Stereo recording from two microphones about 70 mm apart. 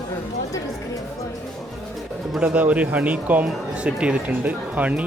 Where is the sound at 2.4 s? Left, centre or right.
Centre.